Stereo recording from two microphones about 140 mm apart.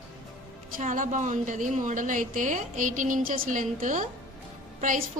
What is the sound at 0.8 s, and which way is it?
A woman's voice, 65° right (ahead or behind).